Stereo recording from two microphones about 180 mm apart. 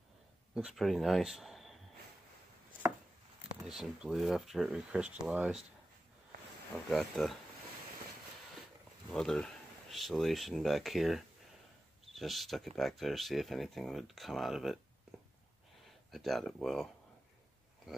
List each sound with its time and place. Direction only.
0.6 s speech: centre (ahead or behind)
3.6 s speech: centre (ahead or behind)
6.9 s speech: centre (ahead or behind)
9.1 s speech: 5° left (ahead or behind)
16.1 s speech: centre (ahead or behind)